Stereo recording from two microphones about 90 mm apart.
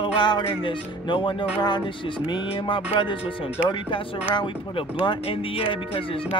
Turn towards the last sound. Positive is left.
turn(degrees=80)